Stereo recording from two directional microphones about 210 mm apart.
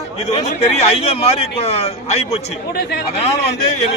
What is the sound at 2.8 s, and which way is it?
Speech, 50° left (ahead or behind).